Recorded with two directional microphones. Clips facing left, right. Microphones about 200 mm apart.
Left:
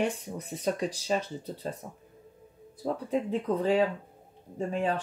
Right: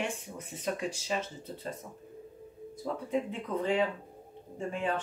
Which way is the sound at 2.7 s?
35° left (ahead or behind).